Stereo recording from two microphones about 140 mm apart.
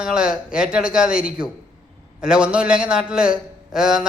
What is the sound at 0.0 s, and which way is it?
A man's voice, 5° right (ahead or behind).